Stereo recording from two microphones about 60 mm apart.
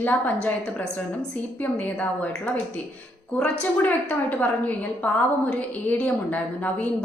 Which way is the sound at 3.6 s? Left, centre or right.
Left.